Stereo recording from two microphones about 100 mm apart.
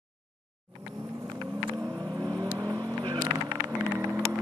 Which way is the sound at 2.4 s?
50° right (ahead or behind).